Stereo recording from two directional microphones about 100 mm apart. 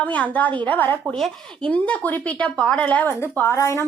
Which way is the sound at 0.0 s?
15° left (ahead or behind).